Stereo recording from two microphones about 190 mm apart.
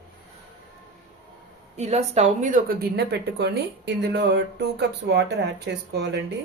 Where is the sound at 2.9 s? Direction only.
60° right (ahead or behind).